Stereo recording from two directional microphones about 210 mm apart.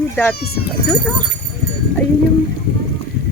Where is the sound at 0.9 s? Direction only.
10° left (ahead or behind).